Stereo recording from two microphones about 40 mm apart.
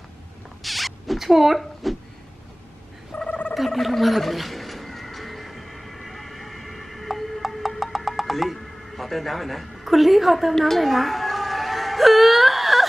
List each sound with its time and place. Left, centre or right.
0.6 s zipper: centre
1.6 s speech: centre
3.3 s gargling: left
3.5 s a sound: centre
10.6 s whimper: centre